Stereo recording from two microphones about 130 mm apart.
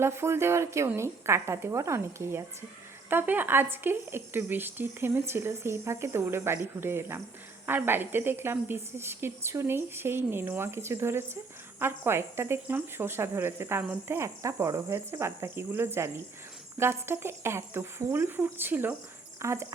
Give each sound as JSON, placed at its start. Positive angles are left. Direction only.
{"t": 0.0, "sound": "speech", "side_deg": -20}